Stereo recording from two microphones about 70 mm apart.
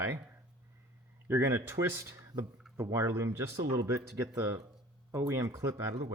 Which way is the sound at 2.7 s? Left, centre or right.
Right.